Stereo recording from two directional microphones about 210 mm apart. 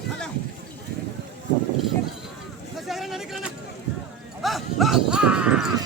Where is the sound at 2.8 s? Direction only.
Centre (ahead or behind).